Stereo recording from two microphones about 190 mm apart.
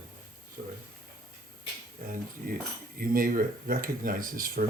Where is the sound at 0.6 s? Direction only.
45° right (ahead or behind).